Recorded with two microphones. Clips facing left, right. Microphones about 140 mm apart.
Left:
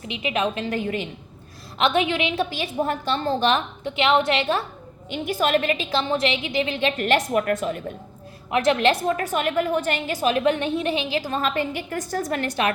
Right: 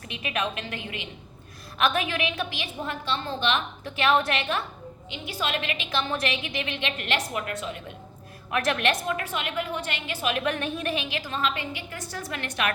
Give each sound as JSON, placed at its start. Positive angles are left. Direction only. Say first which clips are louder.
{"t": 0.1, "sound": "a woman's voice", "louder": "left 6 dB", "side_deg": 25}
{"t": 1.8, "sound": "a woman's voice", "louder": "left 5 dB", "side_deg": 25}
{"t": 3.8, "sound": "a woman's voice", "louder": "left 4 dB", "side_deg": 25}
{"t": 5.1, "sound": "a woman's voice", "louder": "left 9 dB", "side_deg": 50}
{"t": 8.4, "sound": "a woman's voice", "louder": "left 6 dB", "side_deg": 25}